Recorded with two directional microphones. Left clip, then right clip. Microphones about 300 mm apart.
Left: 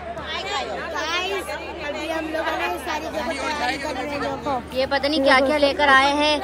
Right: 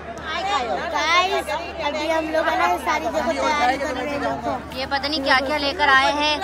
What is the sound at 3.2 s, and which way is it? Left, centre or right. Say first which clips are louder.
Speech: right 4 dB; right.